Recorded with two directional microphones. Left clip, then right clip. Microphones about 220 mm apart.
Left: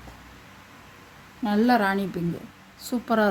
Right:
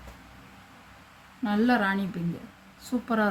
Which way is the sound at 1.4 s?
30° left (ahead or behind).